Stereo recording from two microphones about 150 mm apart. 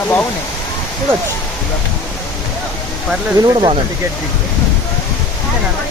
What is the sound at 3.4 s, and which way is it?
Speech, 30° right (ahead or behind).